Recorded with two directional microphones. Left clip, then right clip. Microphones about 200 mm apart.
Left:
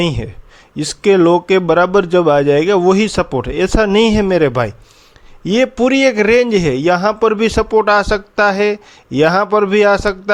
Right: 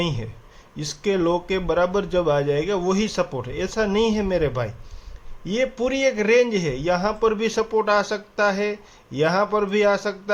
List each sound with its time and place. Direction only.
0.0 s a man's voice: 40° left (ahead or behind)